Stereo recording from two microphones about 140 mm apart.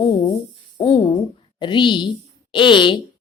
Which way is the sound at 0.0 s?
30° left (ahead or behind).